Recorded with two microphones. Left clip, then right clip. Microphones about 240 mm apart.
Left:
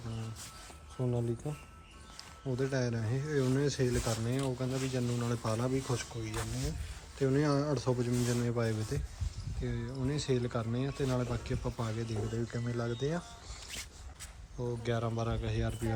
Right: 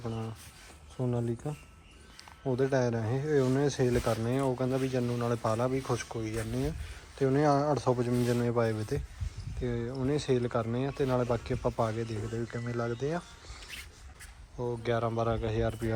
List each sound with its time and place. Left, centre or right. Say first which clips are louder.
1.0 s speech: right 2 dB; left
2.4 s speech: right 6 dB; centre
14.6 s speech: right 5 dB; centre